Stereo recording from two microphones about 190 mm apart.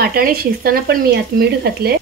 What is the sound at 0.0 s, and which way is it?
Speech, 50° right (ahead or behind).